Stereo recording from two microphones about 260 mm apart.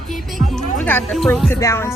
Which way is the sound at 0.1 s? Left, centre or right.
Centre.